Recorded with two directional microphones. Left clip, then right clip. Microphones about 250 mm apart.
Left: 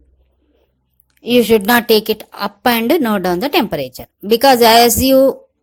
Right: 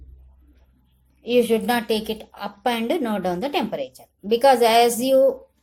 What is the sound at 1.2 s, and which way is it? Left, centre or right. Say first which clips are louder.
A woman's voice: left 7 dB; left.